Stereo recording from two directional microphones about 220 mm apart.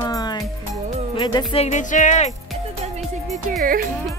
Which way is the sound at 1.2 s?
20° left (ahead or behind).